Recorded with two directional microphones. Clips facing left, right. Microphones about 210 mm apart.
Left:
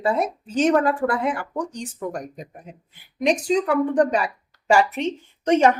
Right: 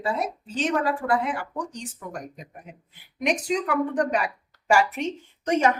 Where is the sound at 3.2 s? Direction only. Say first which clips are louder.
Left 5 dB; 30° left (ahead or behind).